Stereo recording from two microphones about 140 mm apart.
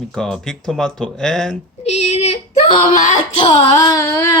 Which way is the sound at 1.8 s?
50° left (ahead or behind).